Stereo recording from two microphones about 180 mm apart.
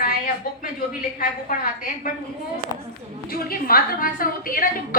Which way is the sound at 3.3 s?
55° left (ahead or behind).